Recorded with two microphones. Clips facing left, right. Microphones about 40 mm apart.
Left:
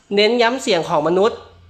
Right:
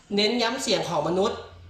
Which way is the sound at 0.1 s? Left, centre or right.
Left.